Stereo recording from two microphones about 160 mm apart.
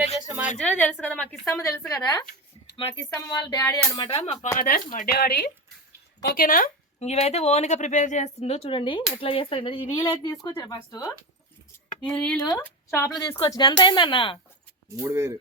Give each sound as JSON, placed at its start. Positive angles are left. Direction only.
{"t": 0.6, "sound": "speech", "side_deg": 10}
{"t": 1.5, "sound": "speech", "side_deg": 20}
{"t": 3.0, "sound": "speech", "side_deg": 15}
{"t": 4.1, "sound": "speech", "side_deg": 40}
{"t": 4.5, "sound": "speech", "side_deg": 60}
{"t": 6.2, "sound": "speech", "side_deg": 65}
{"t": 7.1, "sound": "speech", "side_deg": 40}
{"t": 12.0, "sound": "speech", "side_deg": 5}
{"t": 14.9, "sound": "speech", "side_deg": -15}